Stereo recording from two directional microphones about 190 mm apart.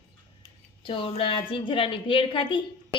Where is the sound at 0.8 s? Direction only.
25° left (ahead or behind).